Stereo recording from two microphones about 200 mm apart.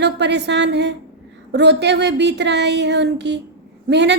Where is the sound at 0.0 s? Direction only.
60° right (ahead or behind).